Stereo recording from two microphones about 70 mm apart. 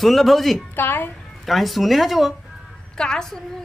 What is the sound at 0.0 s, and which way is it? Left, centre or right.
Speech, centre.